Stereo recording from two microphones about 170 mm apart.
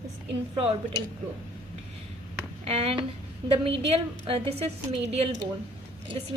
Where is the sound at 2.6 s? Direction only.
35° right (ahead or behind).